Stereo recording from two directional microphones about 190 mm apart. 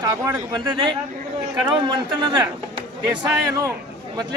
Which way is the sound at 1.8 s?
25° right (ahead or behind).